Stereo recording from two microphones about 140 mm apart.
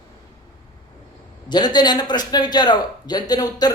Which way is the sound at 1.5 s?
30° left (ahead or behind).